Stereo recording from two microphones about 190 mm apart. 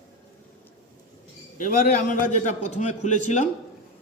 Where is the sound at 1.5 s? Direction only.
45° left (ahead or behind).